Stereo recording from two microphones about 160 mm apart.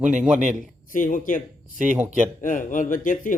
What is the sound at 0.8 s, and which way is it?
Speech, 55° left (ahead or behind).